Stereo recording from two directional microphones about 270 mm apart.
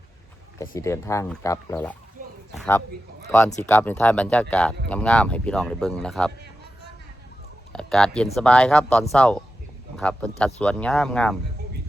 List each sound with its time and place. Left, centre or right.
0.6 s a man's voice: centre
7.7 s speech: centre